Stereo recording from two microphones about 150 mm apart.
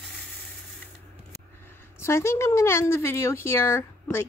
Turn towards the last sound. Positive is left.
turn(degrees=15)  # may be behind; listen again after turning